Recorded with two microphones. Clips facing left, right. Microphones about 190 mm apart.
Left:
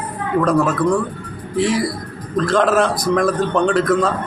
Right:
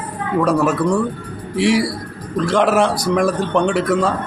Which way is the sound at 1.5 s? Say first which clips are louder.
Right 2 dB; 70° right (ahead or behind).